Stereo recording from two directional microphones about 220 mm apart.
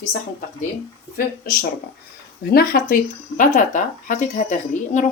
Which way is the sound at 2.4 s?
40° left (ahead or behind).